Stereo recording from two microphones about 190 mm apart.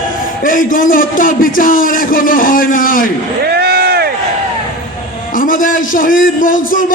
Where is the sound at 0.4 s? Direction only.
45° left (ahead or behind).